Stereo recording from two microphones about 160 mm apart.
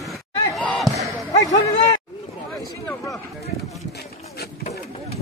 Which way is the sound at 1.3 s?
25° left (ahead or behind).